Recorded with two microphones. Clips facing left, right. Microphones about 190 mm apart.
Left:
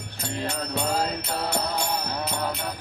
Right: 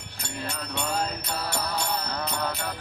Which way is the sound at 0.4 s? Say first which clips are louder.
Left 4 dB; 35° left (ahead or behind).